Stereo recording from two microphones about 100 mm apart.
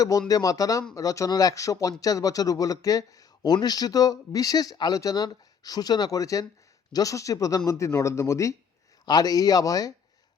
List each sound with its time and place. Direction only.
0.3 s speech: 35° left (ahead or behind)
9.0 s speech: 40° left (ahead or behind)